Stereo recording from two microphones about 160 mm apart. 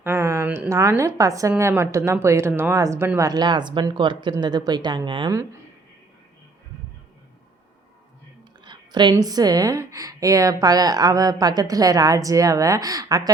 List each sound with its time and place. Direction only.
0.0 s a woman's voice: 15° right (ahead or behind); by 5.3 s 30° right (ahead or behind)
8.6 s a sound: 30° right (ahead or behind)
9.1 s a woman's voice: 25° right (ahead or behind)